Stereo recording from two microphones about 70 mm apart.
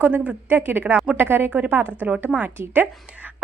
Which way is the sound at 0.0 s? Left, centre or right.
Right.